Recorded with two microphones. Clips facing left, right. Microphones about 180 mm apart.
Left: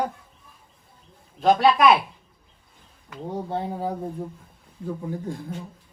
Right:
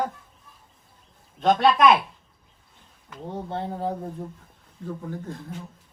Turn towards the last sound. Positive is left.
turn(degrees=10)  # may be behind; listen again after turning